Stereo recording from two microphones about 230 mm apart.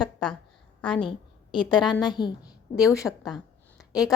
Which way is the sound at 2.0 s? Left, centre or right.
Centre.